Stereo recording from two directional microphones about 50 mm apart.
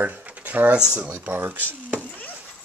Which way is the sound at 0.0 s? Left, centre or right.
Right.